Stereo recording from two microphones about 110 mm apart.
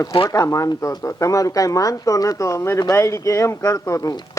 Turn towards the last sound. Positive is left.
turn(degrees=30)  # may be behind; listen again after turning